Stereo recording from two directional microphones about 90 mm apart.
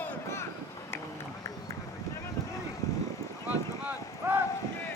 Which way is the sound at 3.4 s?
20° right (ahead or behind).